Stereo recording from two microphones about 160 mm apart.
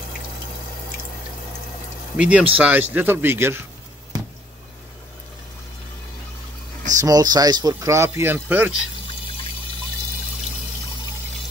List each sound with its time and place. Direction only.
2.1 s speech: 10° right (ahead or behind)
7.0 s speech: 25° right (ahead or behind)